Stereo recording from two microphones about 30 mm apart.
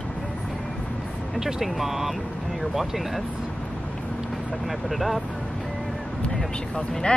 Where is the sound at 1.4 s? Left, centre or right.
Centre.